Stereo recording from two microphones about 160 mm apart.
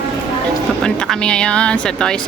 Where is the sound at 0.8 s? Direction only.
5° left (ahead or behind).